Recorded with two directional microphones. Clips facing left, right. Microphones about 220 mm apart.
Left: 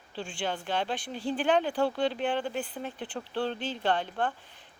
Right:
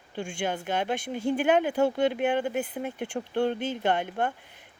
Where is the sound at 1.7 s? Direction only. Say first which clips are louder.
Right 4 dB; 20° right (ahead or behind).